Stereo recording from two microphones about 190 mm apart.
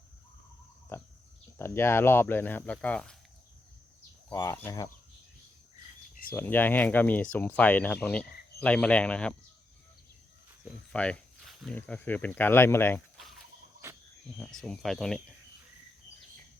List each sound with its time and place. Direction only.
0.9 s a sound: 10° left (ahead or behind)
1.5 s speech: 15° left (ahead or behind)
4.3 s speech: 15° left (ahead or behind)
6.3 s speech: 10° left (ahead or behind)
10.9 s speech: 5° left (ahead or behind)
14.3 s speech: centre (ahead or behind)